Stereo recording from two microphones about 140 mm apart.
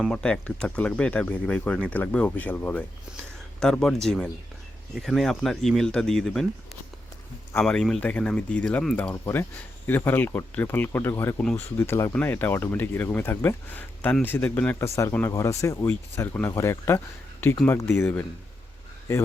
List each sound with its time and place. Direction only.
0.0 s speech: 5° left (ahead or behind)
7.6 s speech: 5° left (ahead or behind)
9.2 s speech: 15° left (ahead or behind)